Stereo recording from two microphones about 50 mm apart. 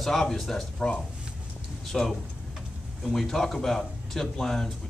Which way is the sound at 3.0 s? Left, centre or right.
Centre.